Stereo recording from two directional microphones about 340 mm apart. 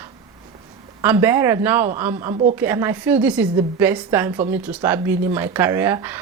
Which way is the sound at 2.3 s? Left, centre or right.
Right.